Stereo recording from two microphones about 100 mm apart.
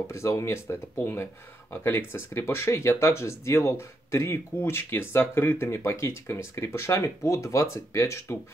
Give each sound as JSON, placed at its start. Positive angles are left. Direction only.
{"t": 0.0, "sound": "speech", "side_deg": 30}